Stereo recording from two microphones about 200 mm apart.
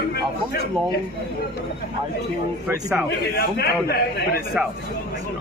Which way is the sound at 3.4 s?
50° left (ahead or behind).